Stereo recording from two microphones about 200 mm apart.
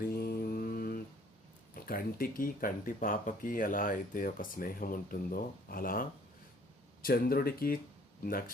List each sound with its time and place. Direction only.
0.0 s mantra: 50° left (ahead or behind)
1.7 s speech: 45° left (ahead or behind)